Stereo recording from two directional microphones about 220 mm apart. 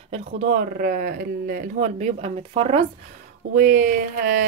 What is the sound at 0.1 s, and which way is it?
Speech, 35° right (ahead or behind).